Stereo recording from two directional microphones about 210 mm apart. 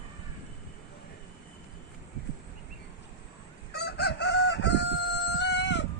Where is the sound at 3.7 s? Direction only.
50° left (ahead or behind).